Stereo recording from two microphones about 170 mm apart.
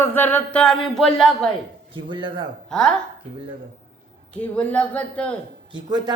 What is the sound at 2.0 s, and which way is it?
Speech, 30° right (ahead or behind).